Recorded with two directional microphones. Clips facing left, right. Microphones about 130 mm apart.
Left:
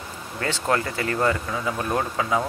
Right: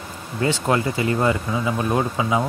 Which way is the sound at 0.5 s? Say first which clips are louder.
Right 3 dB; 15° right (ahead or behind).